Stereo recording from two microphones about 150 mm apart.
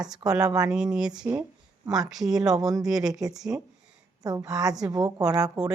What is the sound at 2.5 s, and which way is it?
A woman's voice, 25° right (ahead or behind).